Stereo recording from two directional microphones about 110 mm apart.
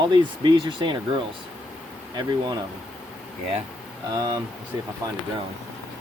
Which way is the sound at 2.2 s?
40° right (ahead or behind).